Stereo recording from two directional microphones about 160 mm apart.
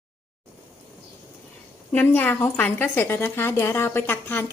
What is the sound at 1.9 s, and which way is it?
A woman's voice, 10° left (ahead or behind).